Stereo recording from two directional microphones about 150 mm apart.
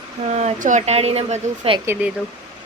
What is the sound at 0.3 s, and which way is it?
Speech, 50° right (ahead or behind).